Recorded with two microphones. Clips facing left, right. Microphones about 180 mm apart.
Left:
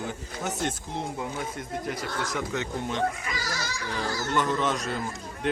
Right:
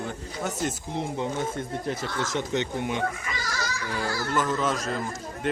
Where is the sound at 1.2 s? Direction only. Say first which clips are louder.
Right 4 dB; 25° right (ahead or behind).